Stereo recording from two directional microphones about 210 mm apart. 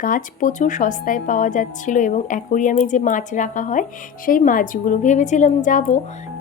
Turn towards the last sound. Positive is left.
turn(degrees=40)  # may be behind; listen again after turning